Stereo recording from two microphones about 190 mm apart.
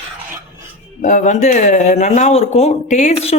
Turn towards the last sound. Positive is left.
turn(degrees=35)  # may be behind; listen again after turning